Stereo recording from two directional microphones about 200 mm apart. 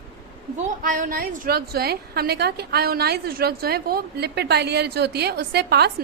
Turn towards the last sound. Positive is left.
turn(degrees=-55)  # may be behind; listen again after turning